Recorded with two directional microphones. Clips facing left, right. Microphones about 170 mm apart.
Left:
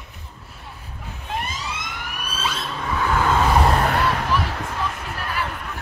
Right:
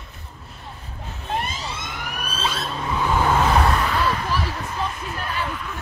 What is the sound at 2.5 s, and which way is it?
Vehicle, 10° right (ahead or behind).